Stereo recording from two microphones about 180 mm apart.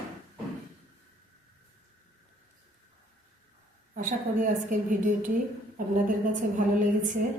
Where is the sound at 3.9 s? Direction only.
45° right (ahead or behind).